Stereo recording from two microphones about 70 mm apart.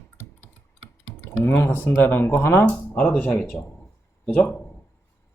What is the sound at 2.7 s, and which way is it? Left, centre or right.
Speech, centre.